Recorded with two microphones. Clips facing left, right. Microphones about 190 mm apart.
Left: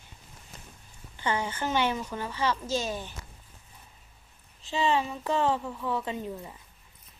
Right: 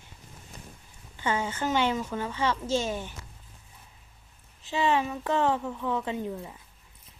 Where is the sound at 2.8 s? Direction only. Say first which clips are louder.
Right 2 dB; 15° right (ahead or behind).